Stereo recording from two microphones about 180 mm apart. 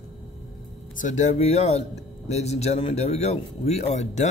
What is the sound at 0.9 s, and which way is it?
Speech, 45° left (ahead or behind).